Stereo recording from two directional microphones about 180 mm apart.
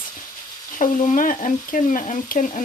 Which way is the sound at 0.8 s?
45° left (ahead or behind).